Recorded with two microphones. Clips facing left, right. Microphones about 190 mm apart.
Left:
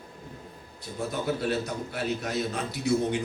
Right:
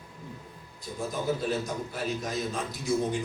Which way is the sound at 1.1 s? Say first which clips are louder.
Left 1 dB; 65° left (ahead or behind).